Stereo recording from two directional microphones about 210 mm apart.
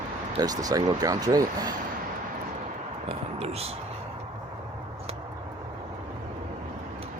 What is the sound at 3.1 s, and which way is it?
Speech, 30° right (ahead or behind).